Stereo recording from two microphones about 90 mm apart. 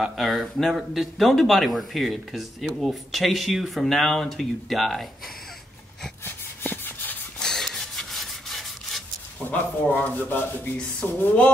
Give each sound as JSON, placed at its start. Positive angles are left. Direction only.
{"t": 0.0, "sound": "speech", "side_deg": 0}
{"t": 6.2, "sound": "rub", "side_deg": 20}
{"t": 7.3, "sound": "rub", "side_deg": 5}
{"t": 9.5, "sound": "rub", "side_deg": 20}
{"t": 11.1, "sound": "a sound", "side_deg": 15}